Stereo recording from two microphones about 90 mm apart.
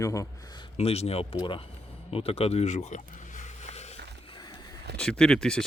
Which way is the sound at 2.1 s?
90° left.